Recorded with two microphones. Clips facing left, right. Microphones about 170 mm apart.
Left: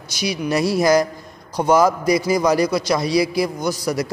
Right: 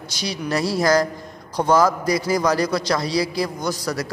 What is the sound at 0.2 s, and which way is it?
A woman's voice, 15° left (ahead or behind).